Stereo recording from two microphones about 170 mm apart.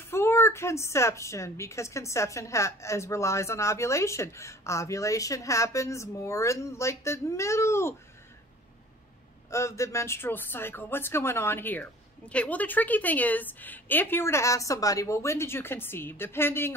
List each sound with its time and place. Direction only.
0.0 s a woman's voice: 15° left (ahead or behind)
9.5 s a woman's voice: 15° left (ahead or behind)